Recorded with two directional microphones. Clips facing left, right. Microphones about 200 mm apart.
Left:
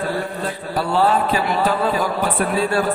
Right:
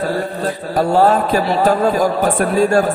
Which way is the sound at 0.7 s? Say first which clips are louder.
Right 5 dB; 45° right (ahead or behind).